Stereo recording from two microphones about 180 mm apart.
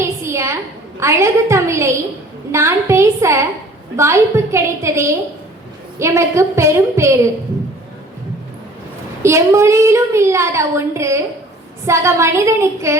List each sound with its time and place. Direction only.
0.0 s a sound: 15° right (ahead or behind)
0.9 s a woman's voice: 15° right (ahead or behind)
9.2 s a woman's voice: 15° right (ahead or behind)